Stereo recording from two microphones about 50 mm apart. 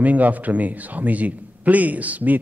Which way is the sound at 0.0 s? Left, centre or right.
Right.